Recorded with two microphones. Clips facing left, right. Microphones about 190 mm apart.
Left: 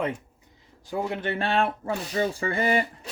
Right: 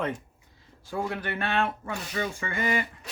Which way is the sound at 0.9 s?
20° left (ahead or behind).